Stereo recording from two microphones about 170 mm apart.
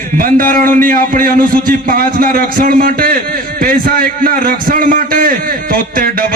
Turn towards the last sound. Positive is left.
turn(degrees=-60)  # may be behind; listen again after turning